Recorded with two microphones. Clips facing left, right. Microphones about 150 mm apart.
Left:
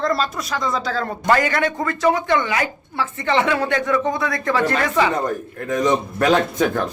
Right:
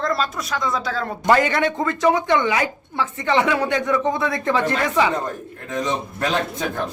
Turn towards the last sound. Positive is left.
turn(degrees=70)  # may be behind; listen again after turning